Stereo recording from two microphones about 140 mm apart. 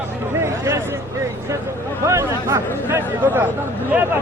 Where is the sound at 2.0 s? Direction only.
20° right (ahead or behind).